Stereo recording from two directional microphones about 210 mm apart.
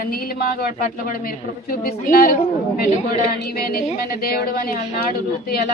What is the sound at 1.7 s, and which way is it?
A woman's voice, 45° left (ahead or behind).